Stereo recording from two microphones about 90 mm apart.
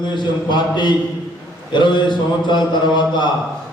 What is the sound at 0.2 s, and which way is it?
A man's voice, 60° left (ahead or behind).